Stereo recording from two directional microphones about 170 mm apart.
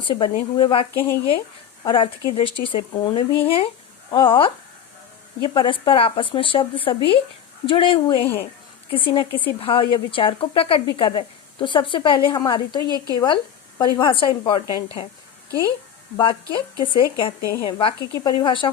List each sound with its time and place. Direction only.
0.0 s a woman's voice: 30° left (ahead or behind)
16.1 s a woman's voice: 30° left (ahead or behind)